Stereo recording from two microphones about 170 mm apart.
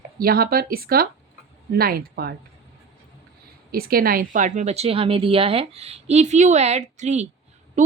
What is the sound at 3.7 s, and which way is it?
A woman's voice, 60° right (ahead or behind).